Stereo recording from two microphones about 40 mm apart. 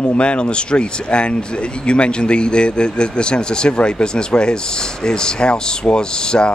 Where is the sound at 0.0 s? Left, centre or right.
Left.